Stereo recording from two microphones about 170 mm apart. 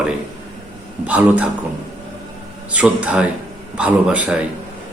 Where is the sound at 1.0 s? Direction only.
10° right (ahead or behind).